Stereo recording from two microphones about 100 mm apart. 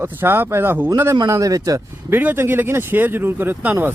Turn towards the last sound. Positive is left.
turn(degrees=-20)  # may be behind; listen again after turning